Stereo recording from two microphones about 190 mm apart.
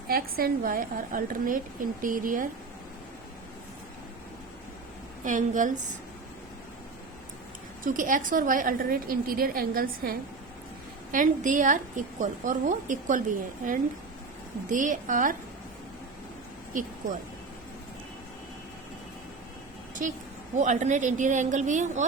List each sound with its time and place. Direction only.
0.1 s a woman's voice: 50° right (ahead or behind)
5.2 s a woman's voice: 40° right (ahead or behind)
7.9 s a woman's voice: 45° right (ahead or behind)
20.0 s a woman's voice: 45° right (ahead or behind)